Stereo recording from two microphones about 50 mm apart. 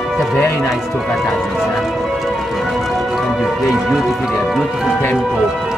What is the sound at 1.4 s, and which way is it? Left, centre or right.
Clip-clop, centre.